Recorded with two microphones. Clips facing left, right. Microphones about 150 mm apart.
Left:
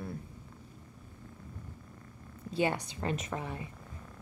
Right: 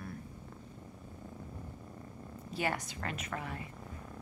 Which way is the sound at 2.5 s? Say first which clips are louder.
Left 5 dB; 20° left (ahead or behind).